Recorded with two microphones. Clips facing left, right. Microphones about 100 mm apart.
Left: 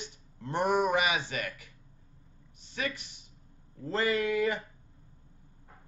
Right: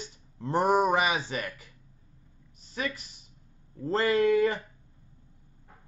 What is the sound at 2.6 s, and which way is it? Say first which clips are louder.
Speech: right 2 dB; 35° right (ahead or behind).